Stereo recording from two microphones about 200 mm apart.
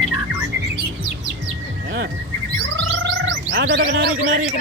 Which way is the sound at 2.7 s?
70° right (ahead or behind).